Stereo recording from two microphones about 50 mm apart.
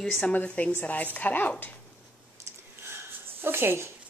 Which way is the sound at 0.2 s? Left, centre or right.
Left.